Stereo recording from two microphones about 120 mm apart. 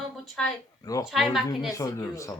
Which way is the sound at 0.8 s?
30° left (ahead or behind).